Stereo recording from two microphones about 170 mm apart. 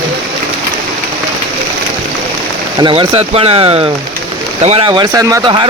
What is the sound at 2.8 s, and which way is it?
Speech, 30° right (ahead or behind).